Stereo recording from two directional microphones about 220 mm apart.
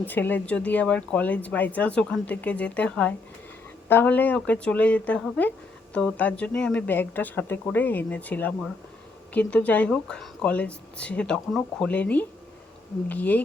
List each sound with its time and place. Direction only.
0.0 s speech: 10° left (ahead or behind)